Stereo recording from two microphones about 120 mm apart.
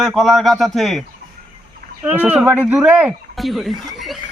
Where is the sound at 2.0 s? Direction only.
15° right (ahead or behind).